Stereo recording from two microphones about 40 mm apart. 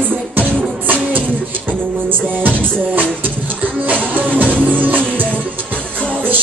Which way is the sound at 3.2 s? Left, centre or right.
Right.